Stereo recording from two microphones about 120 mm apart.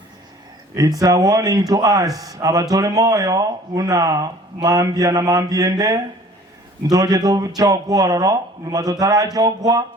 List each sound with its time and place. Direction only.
0.7 s speech: 30° right (ahead or behind)